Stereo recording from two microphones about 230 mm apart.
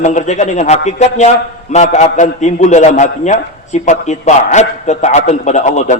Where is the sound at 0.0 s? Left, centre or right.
Left.